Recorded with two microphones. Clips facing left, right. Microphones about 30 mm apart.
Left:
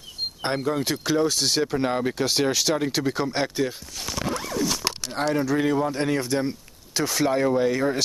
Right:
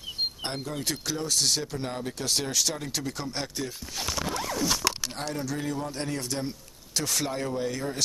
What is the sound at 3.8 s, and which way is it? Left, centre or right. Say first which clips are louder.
Speech: right 1 dB; centre.